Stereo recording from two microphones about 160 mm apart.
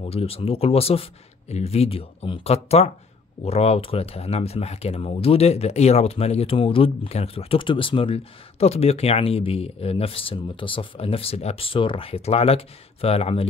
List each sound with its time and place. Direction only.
0.0 s speech: 40° left (ahead or behind)